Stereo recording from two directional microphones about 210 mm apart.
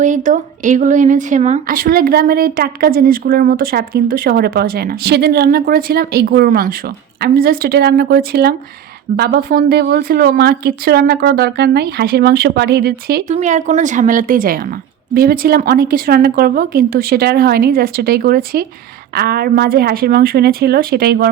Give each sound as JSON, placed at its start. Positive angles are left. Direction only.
{"t": 0.0, "sound": "speech", "side_deg": -35}
{"t": 13.2, "sound": "a woman's voice", "side_deg": -35}